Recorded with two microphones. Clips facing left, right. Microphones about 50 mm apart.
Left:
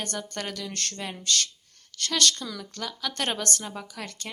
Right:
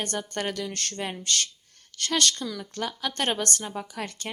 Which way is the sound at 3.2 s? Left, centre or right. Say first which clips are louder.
Right 2 dB; centre.